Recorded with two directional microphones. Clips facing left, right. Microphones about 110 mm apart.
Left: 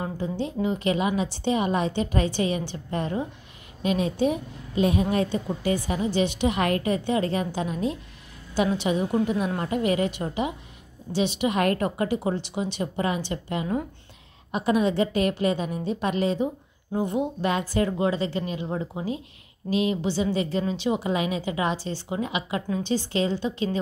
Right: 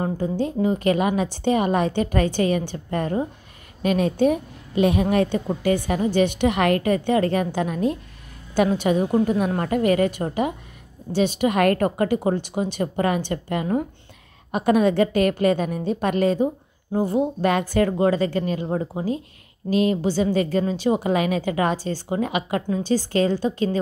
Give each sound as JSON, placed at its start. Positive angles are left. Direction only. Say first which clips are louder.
{"t": 0.0, "sound": "a woman's voice", "louder": "right 5 dB", "side_deg": -45}
{"t": 16.9, "sound": "speech", "louder": "right 4 dB", "side_deg": -35}
{"t": 17.4, "sound": "a woman's voice", "louder": "right 4 dB", "side_deg": -60}
{"t": 17.9, "sound": "a woman's voice", "louder": "right 5 dB", "side_deg": -45}